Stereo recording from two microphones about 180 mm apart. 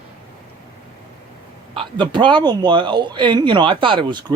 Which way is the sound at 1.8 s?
25° right (ahead or behind).